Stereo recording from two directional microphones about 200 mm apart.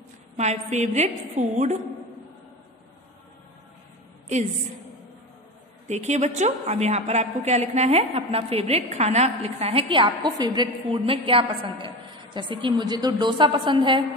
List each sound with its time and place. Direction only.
0.4 s a woman's voice: 35° right (ahead or behind)
5.9 s a woman's voice: 35° right (ahead or behind)